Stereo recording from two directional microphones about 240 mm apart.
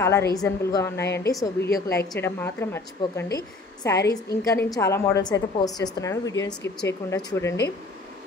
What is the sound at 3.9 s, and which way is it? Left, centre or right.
Speech, left.